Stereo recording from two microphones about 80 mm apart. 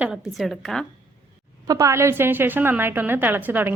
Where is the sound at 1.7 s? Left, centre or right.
Right.